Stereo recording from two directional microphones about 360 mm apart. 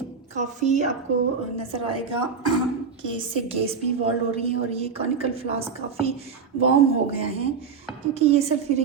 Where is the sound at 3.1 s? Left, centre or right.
Centre.